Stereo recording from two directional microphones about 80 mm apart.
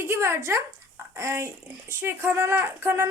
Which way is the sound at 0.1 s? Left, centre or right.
Right.